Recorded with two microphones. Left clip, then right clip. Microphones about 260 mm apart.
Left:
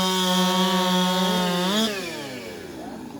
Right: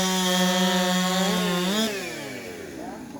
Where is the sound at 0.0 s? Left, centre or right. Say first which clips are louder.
Left 1 dB; centre.